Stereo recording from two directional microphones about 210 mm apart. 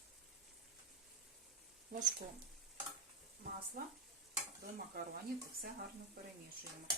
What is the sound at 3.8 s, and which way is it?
Stir, 40° right (ahead or behind).